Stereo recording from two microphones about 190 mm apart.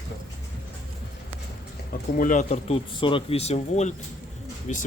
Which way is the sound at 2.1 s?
45° left (ahead or behind).